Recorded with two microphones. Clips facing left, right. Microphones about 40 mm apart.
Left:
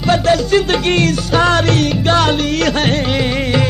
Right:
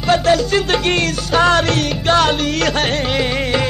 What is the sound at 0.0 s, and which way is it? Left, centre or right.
Music, centre.